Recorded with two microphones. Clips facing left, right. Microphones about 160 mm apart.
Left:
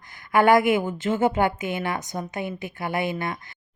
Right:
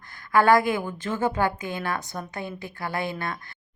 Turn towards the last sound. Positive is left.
turn(degrees=20)  # may be behind; listen again after turning